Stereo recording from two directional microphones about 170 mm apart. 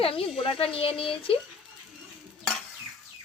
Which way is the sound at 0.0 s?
35° left (ahead or behind).